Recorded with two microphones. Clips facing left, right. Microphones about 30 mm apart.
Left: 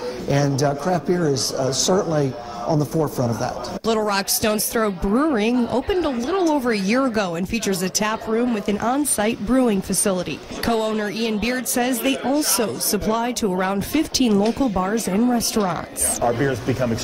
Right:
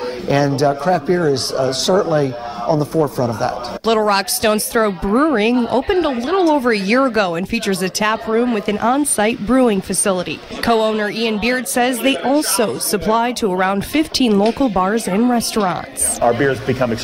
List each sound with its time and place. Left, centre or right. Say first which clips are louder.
0.3 s a man's voice: right 5 dB; right